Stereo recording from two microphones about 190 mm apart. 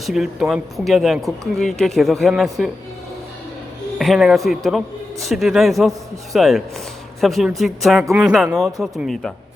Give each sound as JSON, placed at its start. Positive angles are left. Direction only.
{"t": 0.0, "sound": "speech", "side_deg": 0}
{"t": 3.9, "sound": "speech", "side_deg": 0}